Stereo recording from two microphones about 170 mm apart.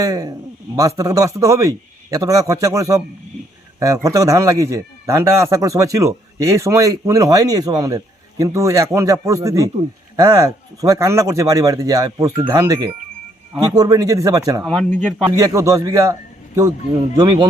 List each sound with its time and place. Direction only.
0.0 s a man's voice: 20° right (ahead or behind)
14.6 s speech: 5° left (ahead or behind)
15.4 s a man's voice: 20° right (ahead or behind)
17.2 s a man's voice: 25° right (ahead or behind)